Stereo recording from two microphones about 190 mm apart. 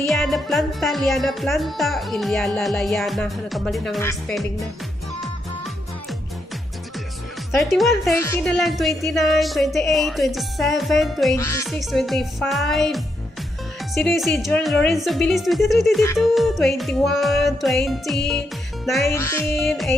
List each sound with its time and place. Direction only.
0.0 s speech: centre (ahead or behind)
7.5 s speech: centre (ahead or behind)
8.1 s music: 15° left (ahead or behind)
8.4 s speech: centre (ahead or behind)
11.3 s music: 15° left (ahead or behind)
11.6 s speech: centre (ahead or behind)
19.0 s music: 15° left (ahead or behind)
19.5 s speech: centre (ahead or behind)